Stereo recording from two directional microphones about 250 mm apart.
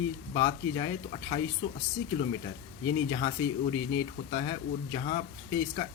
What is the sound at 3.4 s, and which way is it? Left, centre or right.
Speech, left.